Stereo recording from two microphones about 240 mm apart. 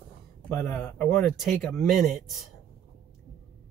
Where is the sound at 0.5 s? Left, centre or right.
Centre.